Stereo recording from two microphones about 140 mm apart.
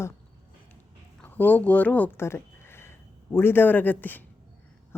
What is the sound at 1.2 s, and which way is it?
A woman's voice, 15° left (ahead or behind).